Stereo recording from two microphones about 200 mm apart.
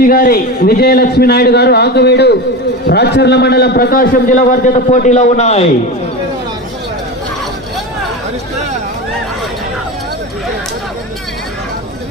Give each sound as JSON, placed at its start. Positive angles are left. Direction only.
{"t": 0.0, "sound": "a man's voice", "side_deg": 45}